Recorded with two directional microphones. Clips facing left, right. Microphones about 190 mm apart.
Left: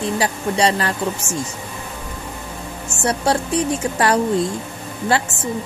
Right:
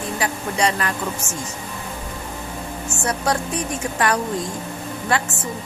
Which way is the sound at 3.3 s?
30° left (ahead or behind).